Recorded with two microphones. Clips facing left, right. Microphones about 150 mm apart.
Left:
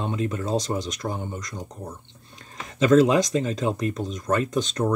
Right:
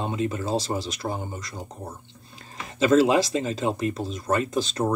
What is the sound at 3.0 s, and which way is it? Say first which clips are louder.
Speech: left 1 dB; 5° right (ahead or behind).